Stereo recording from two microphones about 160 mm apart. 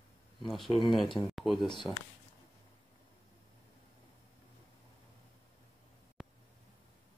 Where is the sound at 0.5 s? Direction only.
Centre (ahead or behind).